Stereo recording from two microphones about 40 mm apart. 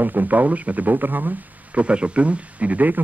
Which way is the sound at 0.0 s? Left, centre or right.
Right.